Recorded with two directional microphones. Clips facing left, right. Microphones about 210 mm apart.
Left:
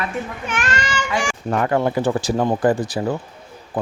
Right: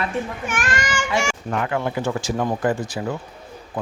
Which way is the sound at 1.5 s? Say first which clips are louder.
Left 5 dB; 40° left (ahead or behind).